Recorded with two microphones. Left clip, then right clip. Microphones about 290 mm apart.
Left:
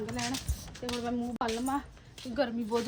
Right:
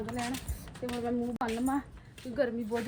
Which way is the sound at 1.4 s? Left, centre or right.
Centre.